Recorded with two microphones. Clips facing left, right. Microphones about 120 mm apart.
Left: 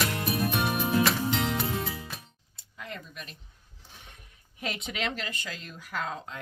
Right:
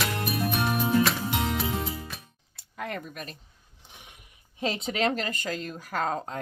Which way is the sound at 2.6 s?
55° right (ahead or behind).